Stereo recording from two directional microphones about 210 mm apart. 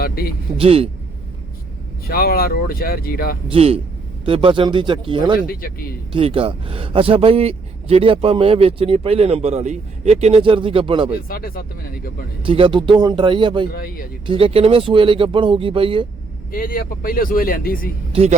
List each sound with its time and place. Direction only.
0.0 s speech: 45° left (ahead or behind)
0.5 s a man's voice: 25° right (ahead or behind)
2.0 s speech: 45° left (ahead or behind)
3.5 s a man's voice: 30° right (ahead or behind)
5.5 s speech: 45° left (ahead or behind)
6.1 s a man's voice: 25° right (ahead or behind)
11.3 s speech: 45° left (ahead or behind)
12.4 s a man's voice: 25° right (ahead or behind)
13.7 s speech: 45° left (ahead or behind)
14.3 s a man's voice: 25° right (ahead or behind)
16.5 s speech: 45° left (ahead or behind)
18.1 s a man's voice: 30° right (ahead or behind)